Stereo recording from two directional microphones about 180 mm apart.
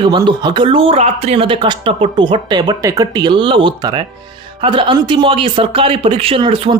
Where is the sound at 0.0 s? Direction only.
25° right (ahead or behind).